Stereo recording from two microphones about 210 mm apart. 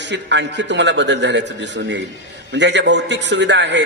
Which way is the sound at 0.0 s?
55° right (ahead or behind).